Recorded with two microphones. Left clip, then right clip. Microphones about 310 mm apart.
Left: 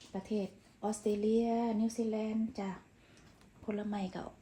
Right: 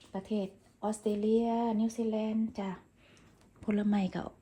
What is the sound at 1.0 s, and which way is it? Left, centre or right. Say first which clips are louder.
Speech: right 2 dB; centre.